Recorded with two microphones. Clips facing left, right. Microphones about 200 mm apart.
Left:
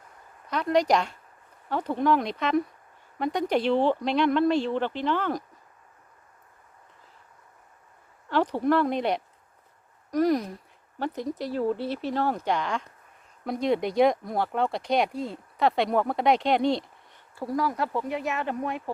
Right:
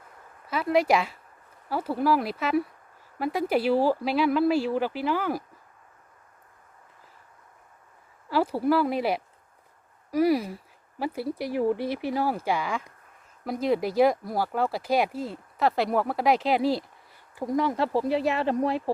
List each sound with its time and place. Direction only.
0.4 s speech: 5° right (ahead or behind)
8.3 s speech: 5° right (ahead or behind)
17.3 s speech: 20° right (ahead or behind)